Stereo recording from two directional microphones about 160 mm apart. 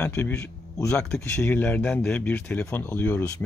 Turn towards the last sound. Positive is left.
turn(degrees=10)  # may be behind; listen again after turning